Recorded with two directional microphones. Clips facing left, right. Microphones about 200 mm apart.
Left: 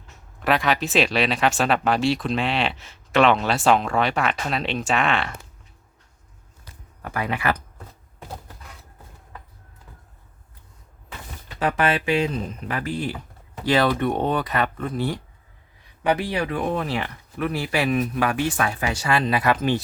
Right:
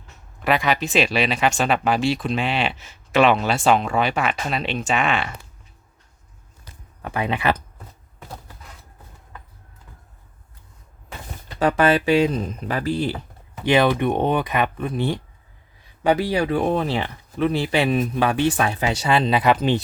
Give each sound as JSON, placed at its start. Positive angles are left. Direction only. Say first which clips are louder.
{"t": 0.3, "sound": "speech", "louder": "right 1 dB", "side_deg": 0}
{"t": 7.0, "sound": "speech", "louder": "right 2 dB", "side_deg": -25}
{"t": 11.4, "sound": "speech", "louder": "right 4 dB", "side_deg": -35}
{"t": 13.7, "sound": "speech", "louder": "right 2 dB", "side_deg": -20}
{"t": 16.3, "sound": "speech", "louder": "right 4 dB", "side_deg": -30}